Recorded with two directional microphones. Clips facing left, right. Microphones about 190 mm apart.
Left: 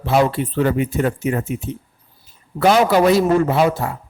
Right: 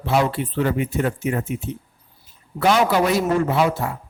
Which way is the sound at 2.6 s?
40° left (ahead or behind).